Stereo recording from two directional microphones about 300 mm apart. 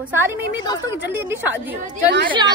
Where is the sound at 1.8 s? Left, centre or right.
Right.